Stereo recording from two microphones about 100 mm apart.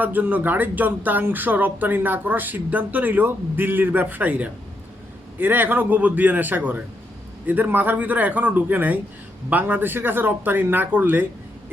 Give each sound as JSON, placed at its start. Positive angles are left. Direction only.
{"t": 0.0, "sound": "speech", "side_deg": -15}